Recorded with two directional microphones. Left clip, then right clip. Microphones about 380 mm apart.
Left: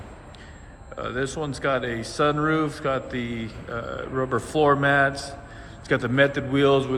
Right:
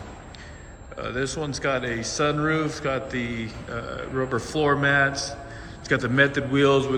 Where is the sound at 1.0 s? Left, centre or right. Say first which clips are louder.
Even; centre.